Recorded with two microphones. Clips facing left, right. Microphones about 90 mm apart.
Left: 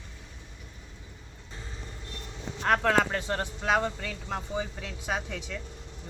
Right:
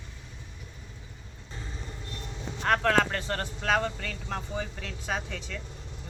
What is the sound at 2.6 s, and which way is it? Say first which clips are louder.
Speech: even; 5° left (ahead or behind).